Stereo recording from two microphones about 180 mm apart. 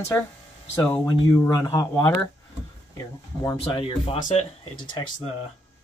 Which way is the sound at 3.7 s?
30° left (ahead or behind).